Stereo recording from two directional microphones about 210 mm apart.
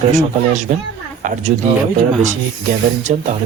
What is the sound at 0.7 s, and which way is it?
Speech, 35° right (ahead or behind).